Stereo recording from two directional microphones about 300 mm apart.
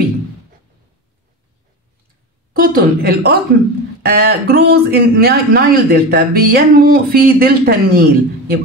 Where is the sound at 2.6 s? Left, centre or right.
Right.